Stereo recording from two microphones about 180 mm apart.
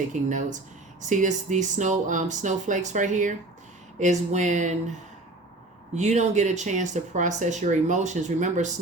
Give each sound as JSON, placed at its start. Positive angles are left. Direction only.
{"t": 0.1, "sound": "speech", "side_deg": -45}